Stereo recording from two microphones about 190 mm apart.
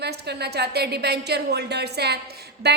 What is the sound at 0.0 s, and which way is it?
A woman's voice, 60° right (ahead or behind).